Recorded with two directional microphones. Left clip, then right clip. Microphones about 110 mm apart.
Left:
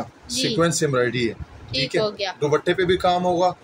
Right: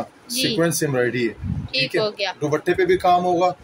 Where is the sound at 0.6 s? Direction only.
35° right (ahead or behind).